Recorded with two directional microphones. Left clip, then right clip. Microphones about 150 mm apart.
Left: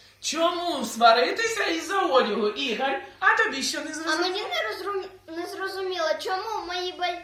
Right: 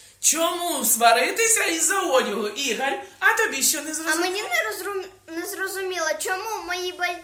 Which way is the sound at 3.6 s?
65° right (ahead or behind).